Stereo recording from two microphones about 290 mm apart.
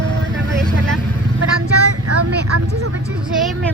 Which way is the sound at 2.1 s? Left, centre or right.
Right.